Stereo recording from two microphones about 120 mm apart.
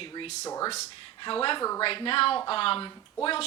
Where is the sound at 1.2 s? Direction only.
45° left (ahead or behind).